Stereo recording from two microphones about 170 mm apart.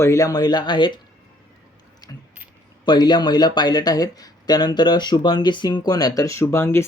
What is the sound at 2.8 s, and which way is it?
Speech, 25° left (ahead or behind).